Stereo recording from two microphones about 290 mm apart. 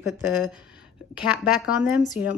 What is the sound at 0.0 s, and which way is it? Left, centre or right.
Speech, centre.